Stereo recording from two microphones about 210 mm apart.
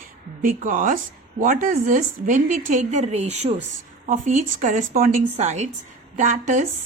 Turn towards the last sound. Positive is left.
turn(degrees=-35)  # may be behind; listen again after turning